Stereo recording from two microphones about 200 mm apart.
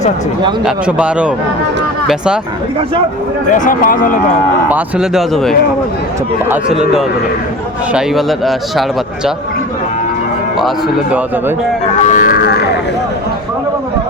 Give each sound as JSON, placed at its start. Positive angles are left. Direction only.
{"t": 0.6, "sound": "speech", "side_deg": -5}
{"t": 3.5, "sound": "a man's voice", "side_deg": 40}
{"t": 4.7, "sound": "speech", "side_deg": -5}
{"t": 12.0, "sound": "didgeridoo", "side_deg": 40}